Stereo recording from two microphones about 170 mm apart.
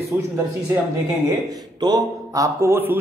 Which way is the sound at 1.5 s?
25° right (ahead or behind).